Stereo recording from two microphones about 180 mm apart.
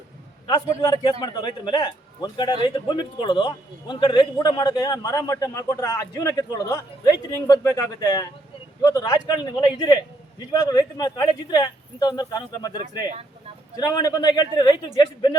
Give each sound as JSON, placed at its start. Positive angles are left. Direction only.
{"t": 0.4, "sound": "a man's voice", "side_deg": 25}